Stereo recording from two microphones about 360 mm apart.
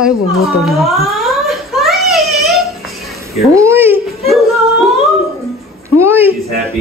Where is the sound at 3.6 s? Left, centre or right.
Centre.